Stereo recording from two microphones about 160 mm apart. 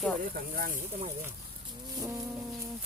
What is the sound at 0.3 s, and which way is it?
Speech, 65° right (ahead or behind).